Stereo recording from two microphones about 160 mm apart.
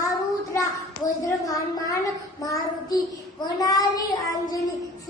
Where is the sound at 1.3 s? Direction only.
20° left (ahead or behind).